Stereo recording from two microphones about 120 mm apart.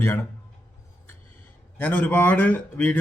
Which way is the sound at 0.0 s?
20° left (ahead or behind).